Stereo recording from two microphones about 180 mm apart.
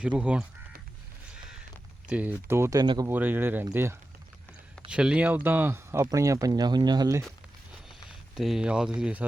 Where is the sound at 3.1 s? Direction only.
10° right (ahead or behind).